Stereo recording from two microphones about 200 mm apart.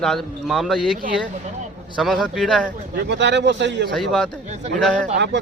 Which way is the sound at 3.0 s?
60° right (ahead or behind).